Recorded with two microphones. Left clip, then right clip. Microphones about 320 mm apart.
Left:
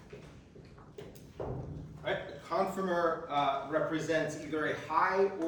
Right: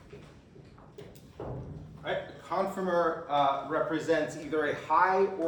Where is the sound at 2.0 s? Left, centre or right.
Centre.